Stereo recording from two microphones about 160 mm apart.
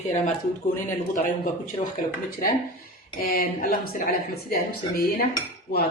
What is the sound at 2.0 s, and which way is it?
Speech, 55° left (ahead or behind).